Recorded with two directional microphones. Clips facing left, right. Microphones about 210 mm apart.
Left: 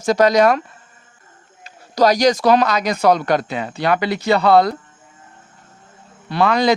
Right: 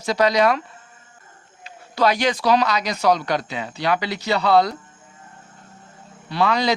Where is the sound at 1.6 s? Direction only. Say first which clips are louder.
Left 4 dB; 40° left (ahead or behind).